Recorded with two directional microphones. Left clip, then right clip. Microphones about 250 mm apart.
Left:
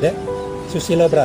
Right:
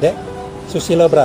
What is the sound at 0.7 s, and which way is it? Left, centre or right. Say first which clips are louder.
Speech: right 3 dB; centre.